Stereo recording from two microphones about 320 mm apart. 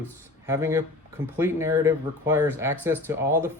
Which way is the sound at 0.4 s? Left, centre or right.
Centre.